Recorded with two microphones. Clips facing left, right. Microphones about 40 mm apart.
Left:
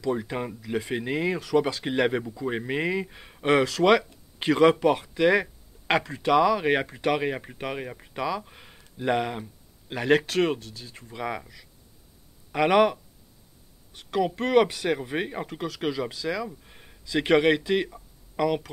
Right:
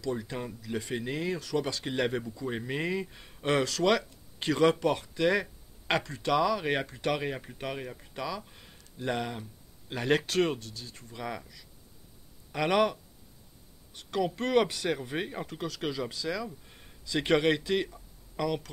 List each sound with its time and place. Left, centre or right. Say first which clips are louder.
0.0 s speech: left 6 dB; left
0.6 s speech: left 5 dB; centre
9.9 s speech: left 4 dB; centre